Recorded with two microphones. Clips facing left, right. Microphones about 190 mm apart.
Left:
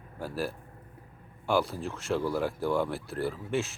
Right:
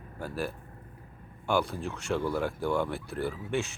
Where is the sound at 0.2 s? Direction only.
Centre (ahead or behind).